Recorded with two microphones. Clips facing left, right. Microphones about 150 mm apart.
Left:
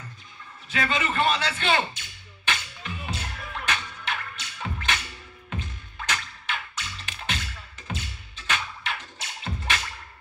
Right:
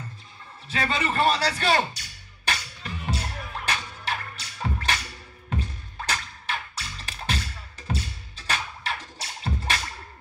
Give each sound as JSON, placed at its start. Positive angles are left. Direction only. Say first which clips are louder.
{"t": 0.7, "sound": "music", "louder": "even", "side_deg": -35}